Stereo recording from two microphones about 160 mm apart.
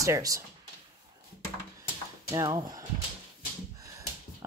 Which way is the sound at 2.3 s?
25° right (ahead or behind).